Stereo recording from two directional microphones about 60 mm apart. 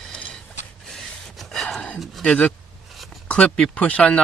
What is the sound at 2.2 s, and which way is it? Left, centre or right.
Speech, centre.